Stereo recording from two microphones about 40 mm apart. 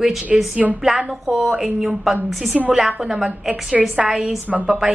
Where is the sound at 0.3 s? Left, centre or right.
Centre.